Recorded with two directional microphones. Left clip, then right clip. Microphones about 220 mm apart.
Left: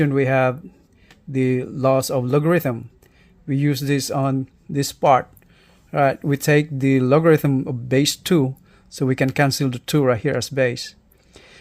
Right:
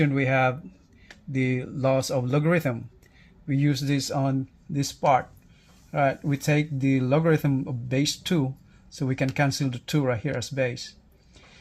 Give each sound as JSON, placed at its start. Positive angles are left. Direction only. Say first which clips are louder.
{"t": 0.0, "sound": "speech", "louder": "left 5 dB", "side_deg": 35}